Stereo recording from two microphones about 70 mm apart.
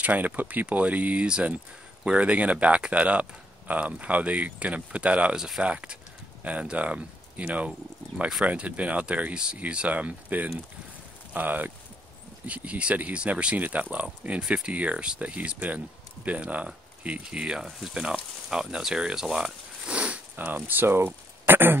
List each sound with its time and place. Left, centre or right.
0.0 s speech: right